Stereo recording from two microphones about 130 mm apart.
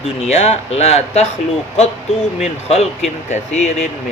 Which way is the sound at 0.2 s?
55° left (ahead or behind).